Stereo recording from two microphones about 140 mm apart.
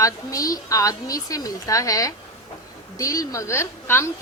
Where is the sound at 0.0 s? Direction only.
25° left (ahead or behind).